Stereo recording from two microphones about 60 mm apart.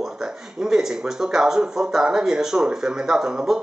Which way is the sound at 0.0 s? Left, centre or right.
Centre.